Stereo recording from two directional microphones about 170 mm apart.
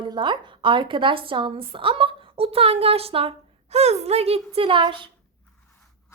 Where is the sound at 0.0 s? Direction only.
25° right (ahead or behind).